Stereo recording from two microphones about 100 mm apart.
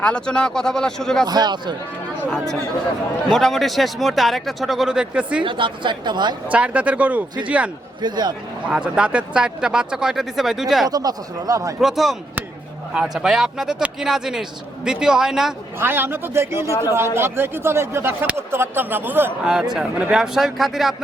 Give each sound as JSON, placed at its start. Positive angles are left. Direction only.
{"t": 0.0, "sound": "speech", "side_deg": 10}
{"t": 1.3, "sound": "speech", "side_deg": -45}
{"t": 3.2, "sound": "speech", "side_deg": 0}
{"t": 5.4, "sound": "speech", "side_deg": -55}
{"t": 6.5, "sound": "speech", "side_deg": -15}
{"t": 8.0, "sound": "speech", "side_deg": -45}
{"t": 8.6, "sound": "speech", "side_deg": -10}
{"t": 10.8, "sound": "speech", "side_deg": -40}
{"t": 11.8, "sound": "speech", "side_deg": 0}
{"t": 15.8, "sound": "speech", "side_deg": -20}
{"t": 19.7, "sound": "speech", "side_deg": -10}